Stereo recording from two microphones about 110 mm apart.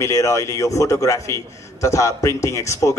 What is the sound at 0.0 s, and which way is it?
A man's voice, 25° left (ahead or behind).